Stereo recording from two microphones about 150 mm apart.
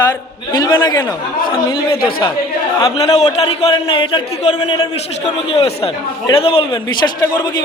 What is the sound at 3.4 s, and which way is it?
Speech, 40° left (ahead or behind).